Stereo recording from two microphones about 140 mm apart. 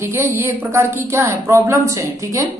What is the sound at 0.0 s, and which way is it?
A woman's voice, 15° right (ahead or behind).